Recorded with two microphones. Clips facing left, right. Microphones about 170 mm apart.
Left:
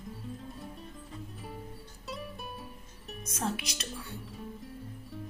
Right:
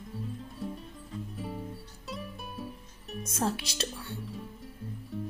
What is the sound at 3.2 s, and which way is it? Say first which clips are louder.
Music: right 3 dB; 30° right (ahead or behind).